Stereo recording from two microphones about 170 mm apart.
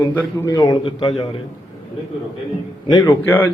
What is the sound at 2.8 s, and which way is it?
Speech, 20° left (ahead or behind).